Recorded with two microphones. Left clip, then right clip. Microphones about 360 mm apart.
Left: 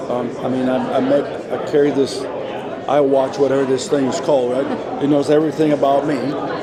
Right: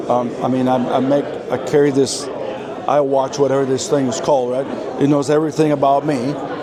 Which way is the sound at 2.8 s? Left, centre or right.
Right.